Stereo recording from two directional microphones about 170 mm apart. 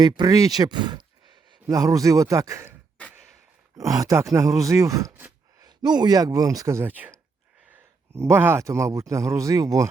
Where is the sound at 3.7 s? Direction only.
20° right (ahead or behind).